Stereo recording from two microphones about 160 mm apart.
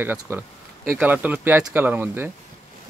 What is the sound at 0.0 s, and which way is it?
Speech, 15° right (ahead or behind).